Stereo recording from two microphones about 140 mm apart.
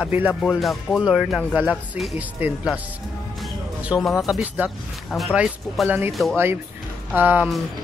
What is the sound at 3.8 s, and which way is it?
Speech, 10° right (ahead or behind).